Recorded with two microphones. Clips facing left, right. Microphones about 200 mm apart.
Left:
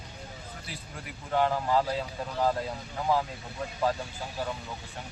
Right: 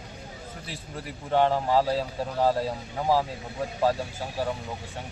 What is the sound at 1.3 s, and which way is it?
Speech, 30° right (ahead or behind).